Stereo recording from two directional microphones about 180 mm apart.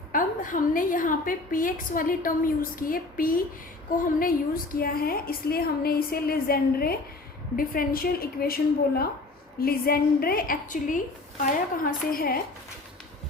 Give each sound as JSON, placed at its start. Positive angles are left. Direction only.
{"t": 0.1, "sound": "a woman's voice", "side_deg": 45}